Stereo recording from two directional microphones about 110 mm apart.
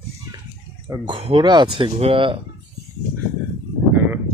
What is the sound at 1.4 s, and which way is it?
Speech, 45° right (ahead or behind).